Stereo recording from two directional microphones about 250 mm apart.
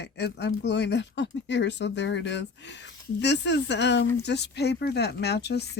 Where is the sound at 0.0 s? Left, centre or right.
Left.